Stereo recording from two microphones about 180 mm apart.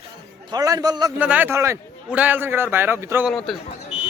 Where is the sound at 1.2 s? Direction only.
10° right (ahead or behind).